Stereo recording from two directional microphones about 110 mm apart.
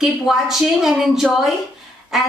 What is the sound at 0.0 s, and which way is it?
A woman's voice, 5° right (ahead or behind).